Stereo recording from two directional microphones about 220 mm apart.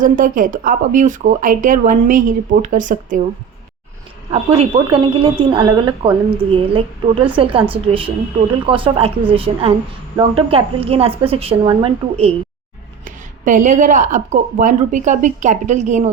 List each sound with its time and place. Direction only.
0.0 s speech: 35° right (ahead or behind)
4.3 s speech: 25° right (ahead or behind)